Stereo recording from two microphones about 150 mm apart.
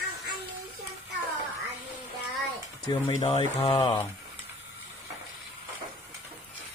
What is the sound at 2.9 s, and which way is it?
Speech, 30° left (ahead or behind).